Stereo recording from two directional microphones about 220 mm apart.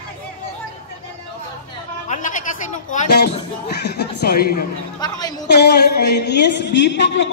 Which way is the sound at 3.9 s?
45° left (ahead or behind).